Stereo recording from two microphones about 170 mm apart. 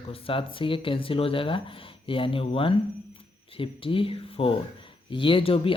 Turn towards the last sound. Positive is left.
turn(degrees=30)  # may be behind; listen again after turning